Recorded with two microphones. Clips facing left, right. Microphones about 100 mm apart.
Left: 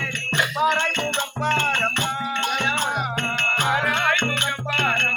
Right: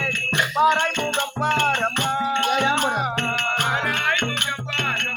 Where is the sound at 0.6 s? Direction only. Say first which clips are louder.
Right 4 dB; 25° right (ahead or behind).